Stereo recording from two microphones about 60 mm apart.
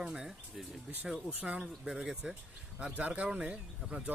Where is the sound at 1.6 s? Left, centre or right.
Centre.